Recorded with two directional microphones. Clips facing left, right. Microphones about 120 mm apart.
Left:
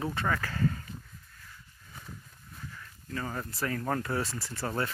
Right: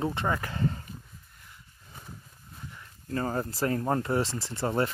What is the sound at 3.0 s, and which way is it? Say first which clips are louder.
Speech: right 6 dB; 35° right (ahead or behind).